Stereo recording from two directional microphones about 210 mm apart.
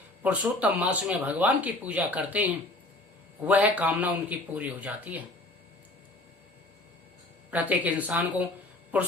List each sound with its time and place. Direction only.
0.2 s speech: 5° right (ahead or behind)
7.5 s speech: 5° right (ahead or behind)